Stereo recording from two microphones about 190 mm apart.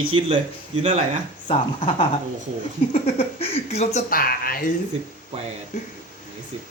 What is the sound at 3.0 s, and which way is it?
Speech, 35° left (ahead or behind).